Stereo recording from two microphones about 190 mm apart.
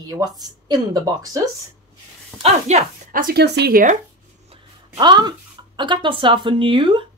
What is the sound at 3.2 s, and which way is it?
Speech, 60° right (ahead or behind).